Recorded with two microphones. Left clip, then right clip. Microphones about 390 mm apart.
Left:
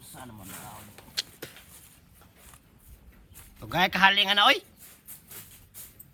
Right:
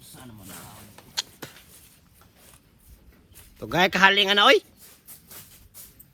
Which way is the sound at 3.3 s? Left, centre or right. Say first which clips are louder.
Right 4 dB; centre.